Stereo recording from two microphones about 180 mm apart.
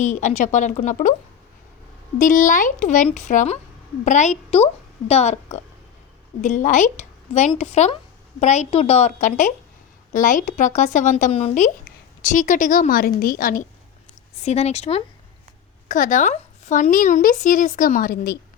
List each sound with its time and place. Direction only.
0.0 s speech: 40° left (ahead or behind)
2.1 s a woman's voice: 45° left (ahead or behind)
14.4 s a woman's voice: 35° left (ahead or behind)
15.9 s speech: 45° left (ahead or behind)